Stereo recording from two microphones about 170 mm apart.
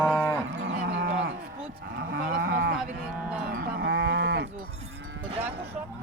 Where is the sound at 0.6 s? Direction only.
90° right.